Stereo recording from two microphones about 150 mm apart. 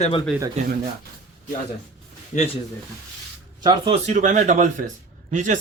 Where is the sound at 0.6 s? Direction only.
50° right (ahead or behind).